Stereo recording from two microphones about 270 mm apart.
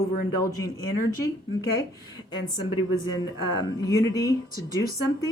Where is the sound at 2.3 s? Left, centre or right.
Centre.